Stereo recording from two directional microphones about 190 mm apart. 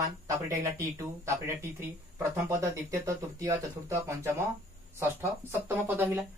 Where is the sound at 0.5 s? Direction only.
15° right (ahead or behind).